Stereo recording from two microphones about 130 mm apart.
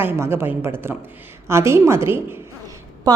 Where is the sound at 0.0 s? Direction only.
20° right (ahead or behind).